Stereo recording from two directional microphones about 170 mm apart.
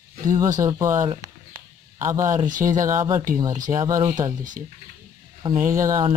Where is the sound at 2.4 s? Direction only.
50° right (ahead or behind).